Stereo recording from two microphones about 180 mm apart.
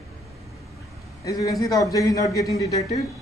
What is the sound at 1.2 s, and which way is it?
A man's voice, 20° left (ahead or behind).